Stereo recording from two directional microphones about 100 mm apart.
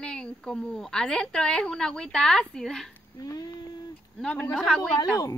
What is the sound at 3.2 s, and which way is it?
Speech, 35° left (ahead or behind).